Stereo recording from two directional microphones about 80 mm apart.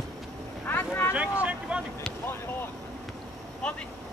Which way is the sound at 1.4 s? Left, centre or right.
Centre.